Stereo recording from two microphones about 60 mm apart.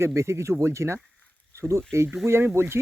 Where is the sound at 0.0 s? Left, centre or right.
Right.